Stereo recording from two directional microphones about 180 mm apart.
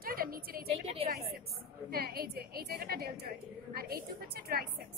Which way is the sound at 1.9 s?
55° right (ahead or behind).